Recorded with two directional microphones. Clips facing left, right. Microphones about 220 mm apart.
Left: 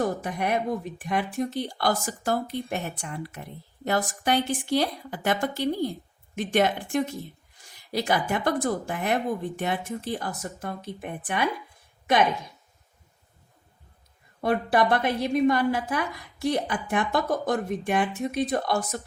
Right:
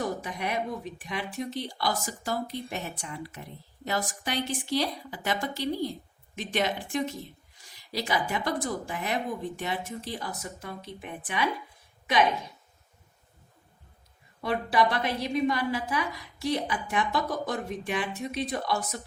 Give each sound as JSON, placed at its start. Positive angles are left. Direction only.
{"t": 0.0, "sound": "a woman's voice", "side_deg": 50}
{"t": 14.4, "sound": "a woman's voice", "side_deg": 50}